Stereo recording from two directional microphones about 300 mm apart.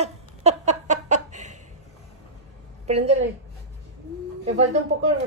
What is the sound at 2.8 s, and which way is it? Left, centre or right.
Speech, right.